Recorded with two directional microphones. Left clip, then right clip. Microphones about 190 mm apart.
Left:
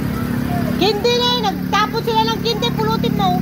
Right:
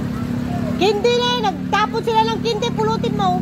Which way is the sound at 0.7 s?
45° right (ahead or behind).